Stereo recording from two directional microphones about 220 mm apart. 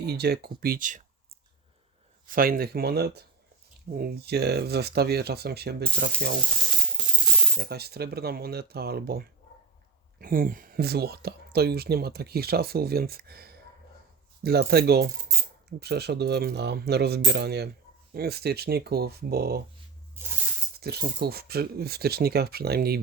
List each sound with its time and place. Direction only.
0.0 s speech: 45° right (ahead or behind)
2.2 s speech: 40° right (ahead or behind)
7.0 s coin: 5° right (ahead or behind)
7.5 s speech: 45° right (ahead or behind)
20.7 s speech: 45° right (ahead or behind)